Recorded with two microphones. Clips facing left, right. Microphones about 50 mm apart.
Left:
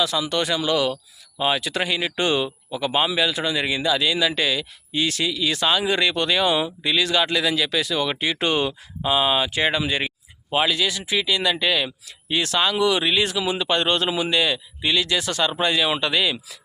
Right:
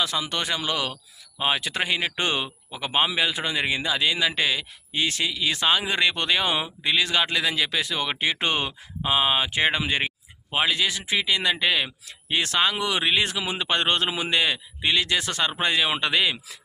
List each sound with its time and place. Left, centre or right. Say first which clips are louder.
0.0 s speech: left 4 dB; right